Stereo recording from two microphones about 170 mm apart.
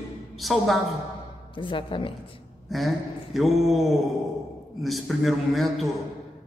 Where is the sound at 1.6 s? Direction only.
30° left (ahead or behind).